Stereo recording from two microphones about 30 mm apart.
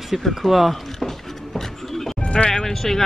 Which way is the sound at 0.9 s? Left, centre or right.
Centre.